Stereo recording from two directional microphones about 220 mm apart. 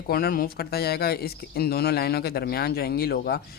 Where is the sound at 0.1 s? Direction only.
40° left (ahead or behind).